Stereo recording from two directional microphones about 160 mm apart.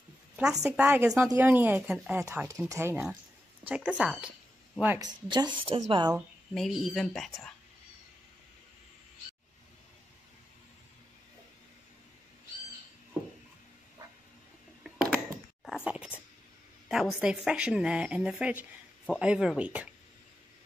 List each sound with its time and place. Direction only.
0.7 s speech: 10° right (ahead or behind)
2.2 s a woman's voice: 20° right (ahead or behind)
5.0 s a woman's voice: 25° right (ahead or behind)
6.1 s a woman's voice: centre (ahead or behind)
14.8 s a sound: 5° right (ahead or behind)
16.9 s a woman's voice: centre (ahead or behind)